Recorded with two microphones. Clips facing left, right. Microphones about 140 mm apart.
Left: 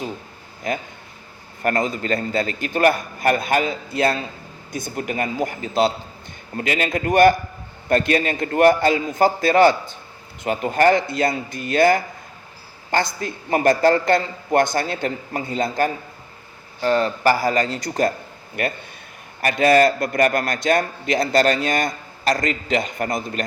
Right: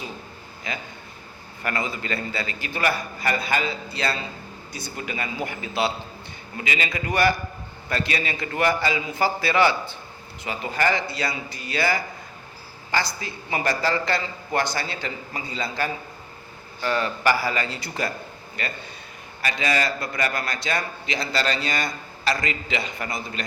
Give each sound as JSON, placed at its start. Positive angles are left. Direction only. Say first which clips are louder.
{"t": 0.7, "sound": "a man's voice", "louder": "left 8 dB", "side_deg": 50}
{"t": 16.8, "sound": "a man's voice", "louder": "left 5 dB", "side_deg": 35}
{"t": 18.6, "sound": "a man's voice", "louder": "left 8 dB", "side_deg": 55}